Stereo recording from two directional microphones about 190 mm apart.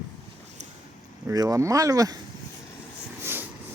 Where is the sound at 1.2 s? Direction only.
20° right (ahead or behind).